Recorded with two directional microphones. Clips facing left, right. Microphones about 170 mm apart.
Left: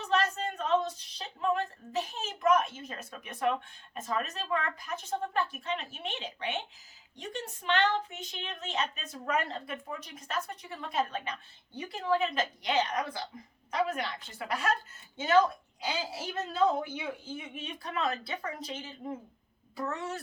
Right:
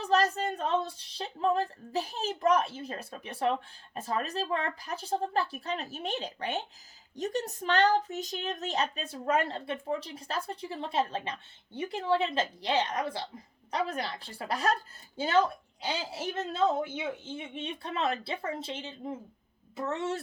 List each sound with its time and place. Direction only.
0.0 s a woman's voice: 35° right (ahead or behind)